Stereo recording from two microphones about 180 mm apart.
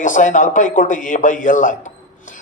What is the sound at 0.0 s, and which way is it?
Speech, 45° left (ahead or behind).